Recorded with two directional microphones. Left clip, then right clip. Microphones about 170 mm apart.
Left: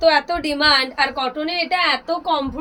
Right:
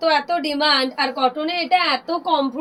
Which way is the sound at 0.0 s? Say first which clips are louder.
Left 2 dB; 20° left (ahead or behind).